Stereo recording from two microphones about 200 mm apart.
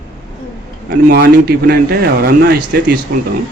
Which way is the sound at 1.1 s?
55° right (ahead or behind).